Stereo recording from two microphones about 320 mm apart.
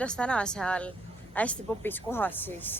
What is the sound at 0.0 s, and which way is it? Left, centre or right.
A woman's voice, centre.